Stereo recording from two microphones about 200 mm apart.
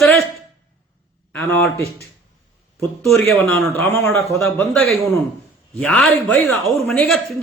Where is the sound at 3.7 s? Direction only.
15° left (ahead or behind).